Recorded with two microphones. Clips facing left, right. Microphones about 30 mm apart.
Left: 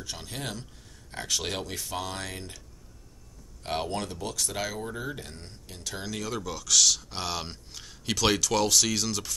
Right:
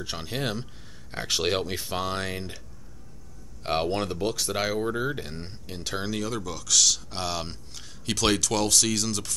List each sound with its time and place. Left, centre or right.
0.0 s speech: right
3.6 s speech: right
6.1 s speech: centre